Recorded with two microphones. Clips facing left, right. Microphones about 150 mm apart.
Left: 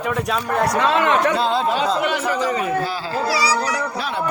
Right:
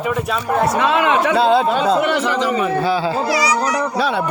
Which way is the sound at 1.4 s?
65° right (ahead or behind).